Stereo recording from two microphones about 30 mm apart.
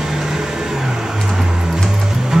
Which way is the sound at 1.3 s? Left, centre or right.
Centre.